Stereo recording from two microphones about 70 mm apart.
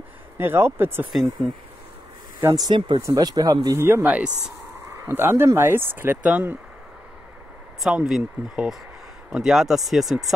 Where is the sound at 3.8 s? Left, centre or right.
Right.